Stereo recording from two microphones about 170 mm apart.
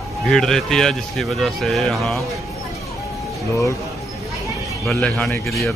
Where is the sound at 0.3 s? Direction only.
5° left (ahead or behind).